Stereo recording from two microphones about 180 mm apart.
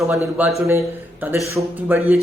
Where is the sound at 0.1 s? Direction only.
10° right (ahead or behind).